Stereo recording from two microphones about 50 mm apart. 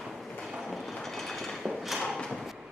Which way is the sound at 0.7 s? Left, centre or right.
Centre.